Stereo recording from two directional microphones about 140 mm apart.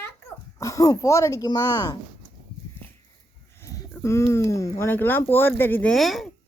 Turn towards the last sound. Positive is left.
turn(degrees=0)  # may be behind; listen again after turning